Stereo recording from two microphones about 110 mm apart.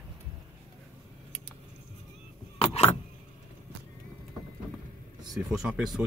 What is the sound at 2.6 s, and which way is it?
Vehicle, 70° left (ahead or behind).